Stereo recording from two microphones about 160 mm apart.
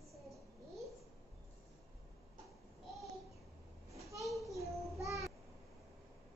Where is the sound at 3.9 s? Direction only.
20° right (ahead or behind).